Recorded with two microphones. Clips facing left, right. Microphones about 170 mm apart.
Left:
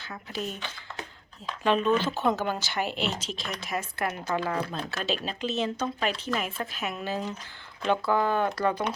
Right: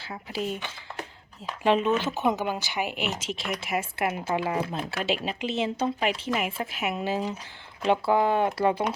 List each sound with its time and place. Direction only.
0.4 s speech: 15° right (ahead or behind)
1.6 s speech: 25° right (ahead or behind)